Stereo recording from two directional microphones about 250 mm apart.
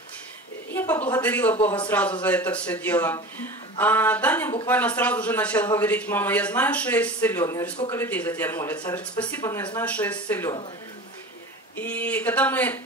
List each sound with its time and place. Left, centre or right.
0.7 s a man's voice: centre
11.7 s a man's voice: centre